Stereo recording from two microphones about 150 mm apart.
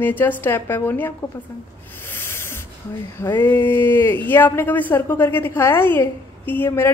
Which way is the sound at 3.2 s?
15° left (ahead or behind).